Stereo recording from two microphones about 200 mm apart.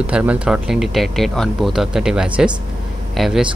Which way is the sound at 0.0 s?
5° right (ahead or behind).